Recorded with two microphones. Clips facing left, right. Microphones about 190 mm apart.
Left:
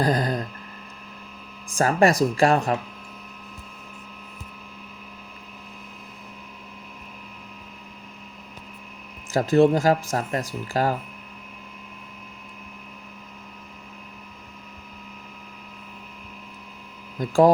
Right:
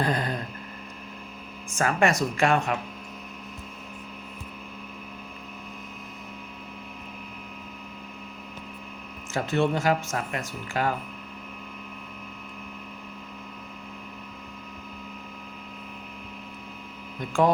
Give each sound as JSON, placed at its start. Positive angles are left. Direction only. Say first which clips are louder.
{"t": 0.0, "sound": "mains hum", "louder": "left 4 dB", "side_deg": 35}
{"t": 1.7, "sound": "speech", "louder": "left 4 dB", "side_deg": 35}
{"t": 9.3, "sound": "speech", "louder": "left 7 dB", "side_deg": 35}
{"t": 17.2, "sound": "speech", "louder": "left 6 dB", "side_deg": 35}